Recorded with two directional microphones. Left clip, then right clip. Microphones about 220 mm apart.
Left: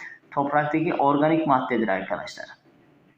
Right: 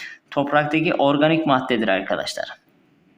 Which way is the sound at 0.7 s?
50° right (ahead or behind).